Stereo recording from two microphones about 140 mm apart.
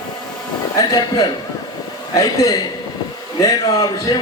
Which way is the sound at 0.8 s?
30° left (ahead or behind).